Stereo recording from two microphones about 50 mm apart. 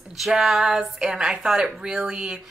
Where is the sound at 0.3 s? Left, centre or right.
Centre.